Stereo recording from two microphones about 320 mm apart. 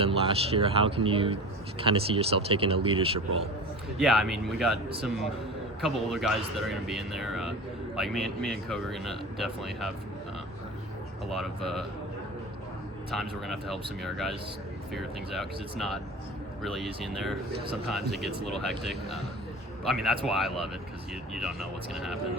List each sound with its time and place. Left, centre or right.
0.0 s speech: centre
3.9 s speech: centre
11.3 s speech: centre
13.1 s speech: centre
21.9 s speech: centre